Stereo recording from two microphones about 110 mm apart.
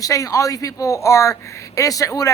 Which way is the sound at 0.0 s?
30° left (ahead or behind).